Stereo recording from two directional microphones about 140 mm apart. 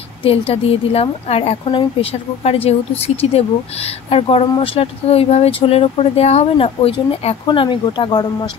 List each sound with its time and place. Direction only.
0.2 s speech: 40° left (ahead or behind)